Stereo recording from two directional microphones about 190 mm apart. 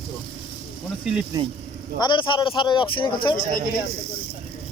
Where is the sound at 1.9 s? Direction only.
25° left (ahead or behind).